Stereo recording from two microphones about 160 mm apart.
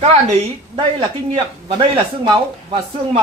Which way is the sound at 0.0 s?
40° right (ahead or behind).